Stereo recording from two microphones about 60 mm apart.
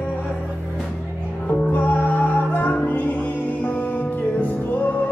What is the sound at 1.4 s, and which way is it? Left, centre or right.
Music, left.